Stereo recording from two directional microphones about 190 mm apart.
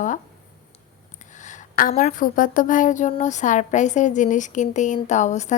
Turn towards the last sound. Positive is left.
turn(degrees=40)  # may be behind; listen again after turning